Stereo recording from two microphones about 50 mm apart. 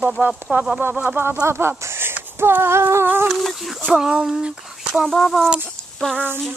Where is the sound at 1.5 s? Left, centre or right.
Right.